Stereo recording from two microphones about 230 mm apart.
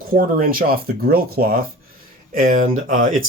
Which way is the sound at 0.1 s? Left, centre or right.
Right.